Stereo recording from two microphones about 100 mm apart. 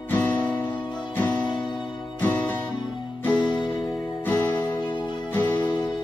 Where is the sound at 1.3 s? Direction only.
50° left (ahead or behind).